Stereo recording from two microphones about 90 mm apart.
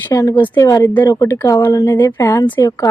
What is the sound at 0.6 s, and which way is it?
A woman's voice, 40° left (ahead or behind).